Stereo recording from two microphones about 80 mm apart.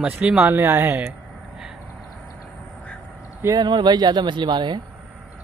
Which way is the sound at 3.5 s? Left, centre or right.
Right.